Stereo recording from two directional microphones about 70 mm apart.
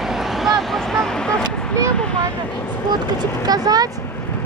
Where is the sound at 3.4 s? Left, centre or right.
Right.